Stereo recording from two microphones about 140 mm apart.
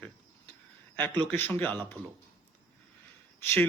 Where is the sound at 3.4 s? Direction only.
15° left (ahead or behind).